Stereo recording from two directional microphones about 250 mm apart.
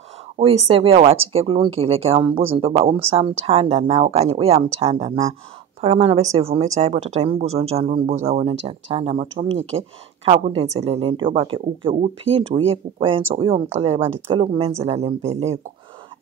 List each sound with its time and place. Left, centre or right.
0.4 s a woman's voice: right